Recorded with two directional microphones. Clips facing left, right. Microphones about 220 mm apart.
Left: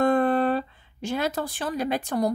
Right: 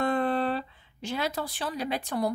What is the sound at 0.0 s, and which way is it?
A woman's voice, 50° left (ahead or behind).